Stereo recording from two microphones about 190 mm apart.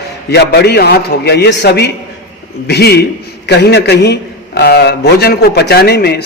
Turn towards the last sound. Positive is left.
turn(degrees=60)  # may be behind; listen again after turning